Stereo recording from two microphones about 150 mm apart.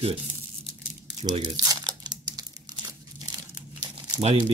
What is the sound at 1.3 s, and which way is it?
Crumpling, 30° right (ahead or behind).